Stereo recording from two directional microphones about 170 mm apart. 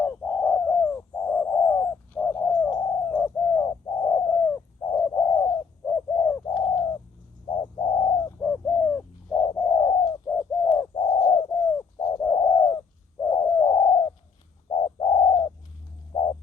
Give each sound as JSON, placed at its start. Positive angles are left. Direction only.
{"t": 0.0, "sound": "bird", "side_deg": 10}
{"t": 8.4, "sound": "bird", "side_deg": 10}
{"t": 10.2, "sound": "bird", "side_deg": 10}
{"t": 10.7, "sound": "bird", "side_deg": 25}
{"t": 16.1, "sound": "music", "side_deg": 30}